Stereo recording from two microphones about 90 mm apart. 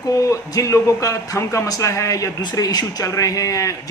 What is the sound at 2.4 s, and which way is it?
A man's voice, 50° left (ahead or behind).